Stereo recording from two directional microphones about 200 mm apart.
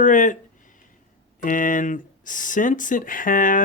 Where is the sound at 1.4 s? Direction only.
40° left (ahead or behind).